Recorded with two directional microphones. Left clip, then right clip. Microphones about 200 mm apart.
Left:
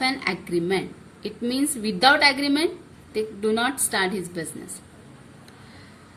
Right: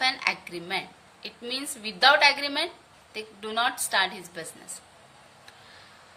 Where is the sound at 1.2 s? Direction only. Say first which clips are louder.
Left 7 dB; 20° right (ahead or behind).